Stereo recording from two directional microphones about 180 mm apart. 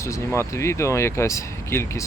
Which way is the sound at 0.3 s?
15° left (ahead or behind).